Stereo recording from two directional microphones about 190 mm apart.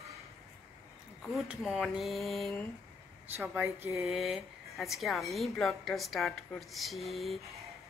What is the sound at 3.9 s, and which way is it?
Speech, centre (ahead or behind).